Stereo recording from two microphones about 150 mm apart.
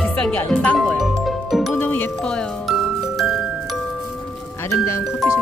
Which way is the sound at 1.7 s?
10° left (ahead or behind).